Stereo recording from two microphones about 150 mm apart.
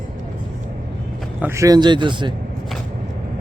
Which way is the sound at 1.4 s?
20° right (ahead or behind).